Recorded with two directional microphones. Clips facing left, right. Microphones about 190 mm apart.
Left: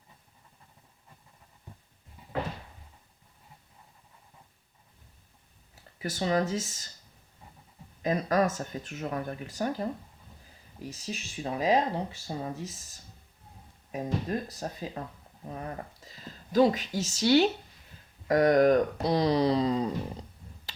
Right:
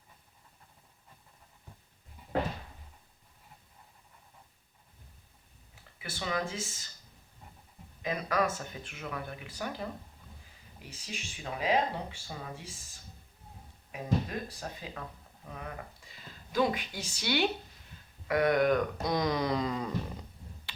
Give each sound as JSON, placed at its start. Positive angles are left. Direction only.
{"t": 6.0, "sound": "speech", "side_deg": 40}
{"t": 8.0, "sound": "speech", "side_deg": 40}
{"t": 13.9, "sound": "speech", "side_deg": 40}